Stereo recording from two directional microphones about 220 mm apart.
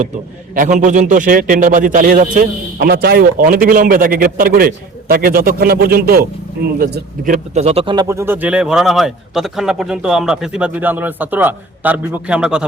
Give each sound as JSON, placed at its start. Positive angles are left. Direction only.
{"t": 0.5, "sound": "a man's voice", "side_deg": -35}